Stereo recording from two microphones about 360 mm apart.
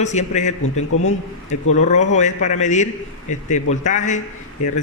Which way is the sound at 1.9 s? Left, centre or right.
Centre.